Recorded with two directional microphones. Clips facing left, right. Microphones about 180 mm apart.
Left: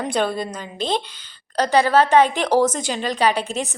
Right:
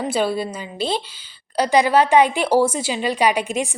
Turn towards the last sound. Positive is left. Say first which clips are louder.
# right 1 dB
turn(degrees=-10)  # may be behind; listen again after turning